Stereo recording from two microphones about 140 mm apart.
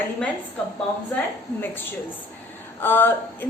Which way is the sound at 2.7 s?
15° left (ahead or behind).